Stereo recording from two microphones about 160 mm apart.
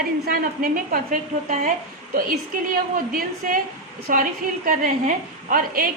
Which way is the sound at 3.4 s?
55° right (ahead or behind).